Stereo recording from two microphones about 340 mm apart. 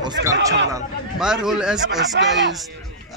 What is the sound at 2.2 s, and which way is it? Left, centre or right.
Speech, right.